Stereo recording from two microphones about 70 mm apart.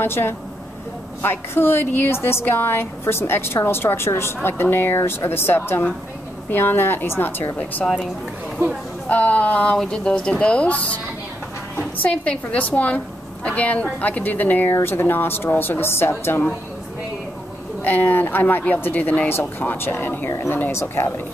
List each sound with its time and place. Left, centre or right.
0.0 s a woman's voice: left
9.1 s a woman's voice: left
17.8 s a woman's voice: left